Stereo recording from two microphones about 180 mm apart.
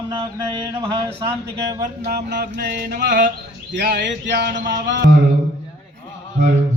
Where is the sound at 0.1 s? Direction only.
25° right (ahead or behind).